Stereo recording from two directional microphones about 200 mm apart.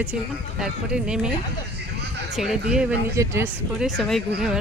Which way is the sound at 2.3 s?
Centre (ahead or behind).